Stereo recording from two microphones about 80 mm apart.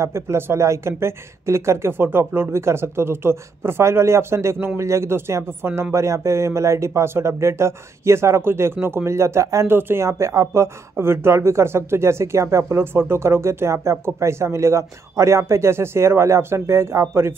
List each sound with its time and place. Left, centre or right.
0.0 s speech: right